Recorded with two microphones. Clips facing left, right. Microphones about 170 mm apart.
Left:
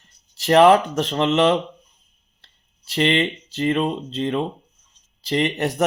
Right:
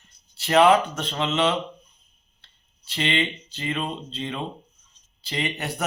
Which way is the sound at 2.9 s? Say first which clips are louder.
Left 6 dB; 40° left (ahead or behind).